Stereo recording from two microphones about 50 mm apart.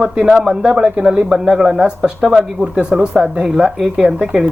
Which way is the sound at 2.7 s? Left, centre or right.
Centre.